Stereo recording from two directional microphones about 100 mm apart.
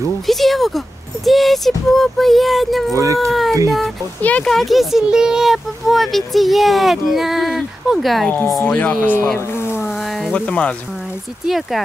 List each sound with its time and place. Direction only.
0.3 s speech: centre (ahead or behind)
2.9 s speech: 35° right (ahead or behind)
3.3 s a sound: centre (ahead or behind)
4.2 s speech: 15° left (ahead or behind)
4.5 s speech: centre (ahead or behind)
8.6 s speech: 15° left (ahead or behind)
9.6 s a sound: 25° left (ahead or behind)
9.8 s a sound: 5° right (ahead or behind)
10.3 s speech: 10° left (ahead or behind)
11.4 s speech: centre (ahead or behind)